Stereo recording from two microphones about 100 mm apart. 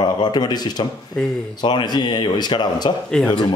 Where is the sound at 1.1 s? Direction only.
5° left (ahead or behind).